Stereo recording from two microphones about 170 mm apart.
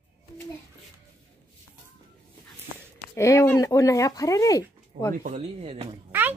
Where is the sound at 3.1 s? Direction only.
15° left (ahead or behind).